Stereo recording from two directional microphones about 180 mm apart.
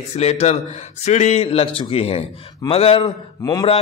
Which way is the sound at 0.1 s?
35° left (ahead or behind).